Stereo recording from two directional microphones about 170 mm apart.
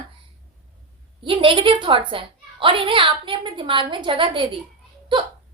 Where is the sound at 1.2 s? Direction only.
30° right (ahead or behind).